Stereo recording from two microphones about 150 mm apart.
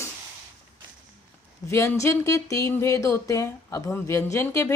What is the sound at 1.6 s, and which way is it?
A woman's voice, 20° left (ahead or behind).